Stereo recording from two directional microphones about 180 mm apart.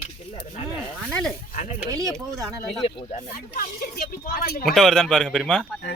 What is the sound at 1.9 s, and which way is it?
Speech, 20° right (ahead or behind).